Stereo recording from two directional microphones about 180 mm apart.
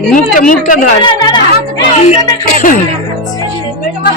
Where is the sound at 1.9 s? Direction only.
35° left (ahead or behind).